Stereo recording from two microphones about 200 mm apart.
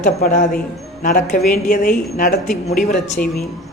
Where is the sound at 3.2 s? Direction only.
45° left (ahead or behind).